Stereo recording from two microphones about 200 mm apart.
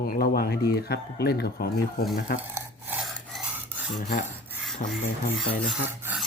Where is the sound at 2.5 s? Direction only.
5° right (ahead or behind).